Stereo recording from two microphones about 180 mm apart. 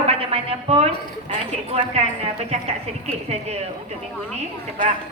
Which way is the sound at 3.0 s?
35° right (ahead or behind).